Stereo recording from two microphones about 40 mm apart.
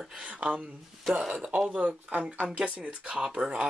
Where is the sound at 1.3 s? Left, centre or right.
Right.